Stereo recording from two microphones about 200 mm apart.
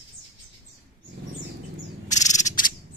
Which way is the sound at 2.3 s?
35° left (ahead or behind).